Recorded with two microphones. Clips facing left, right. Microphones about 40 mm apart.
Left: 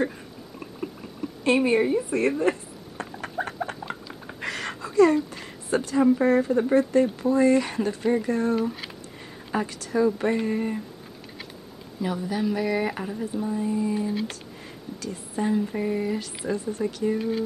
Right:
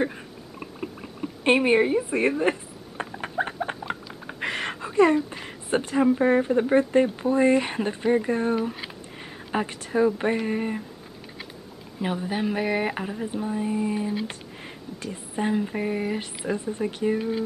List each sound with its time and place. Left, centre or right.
0.6 s rowboat: right
1.4 s speech: right
2.0 s a sound: right
5.1 s speech: right
12.0 s speech: right
15.4 s speech: right